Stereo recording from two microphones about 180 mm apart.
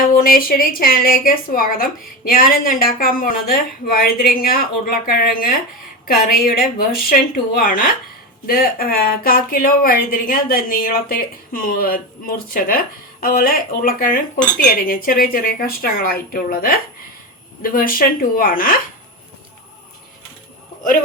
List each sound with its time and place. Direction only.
0.2 s a woman's voice: 55° left (ahead or behind)